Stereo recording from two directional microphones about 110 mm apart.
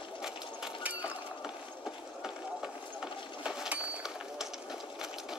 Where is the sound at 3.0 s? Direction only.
5° right (ahead or behind).